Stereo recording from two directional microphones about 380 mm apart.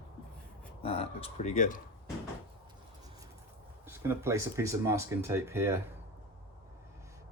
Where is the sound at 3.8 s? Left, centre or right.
Centre.